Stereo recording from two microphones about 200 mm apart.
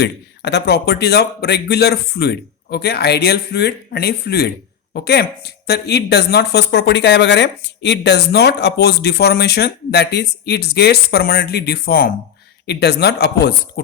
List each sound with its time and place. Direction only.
0.0 s speech: 55° left (ahead or behind)